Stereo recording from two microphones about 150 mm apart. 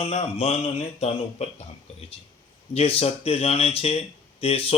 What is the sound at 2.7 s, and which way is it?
Speech, 40° left (ahead or behind).